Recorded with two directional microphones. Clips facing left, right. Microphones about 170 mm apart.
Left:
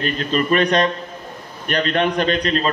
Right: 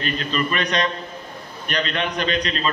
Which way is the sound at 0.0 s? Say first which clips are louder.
Left 4 dB; 45° left (ahead or behind).